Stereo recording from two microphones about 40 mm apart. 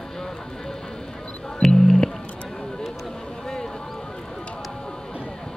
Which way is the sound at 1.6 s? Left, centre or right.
Centre.